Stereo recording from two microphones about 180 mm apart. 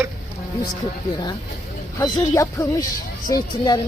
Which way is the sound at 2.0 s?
20° left (ahead or behind).